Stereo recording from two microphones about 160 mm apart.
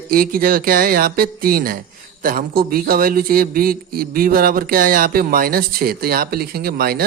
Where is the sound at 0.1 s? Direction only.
65° right (ahead or behind).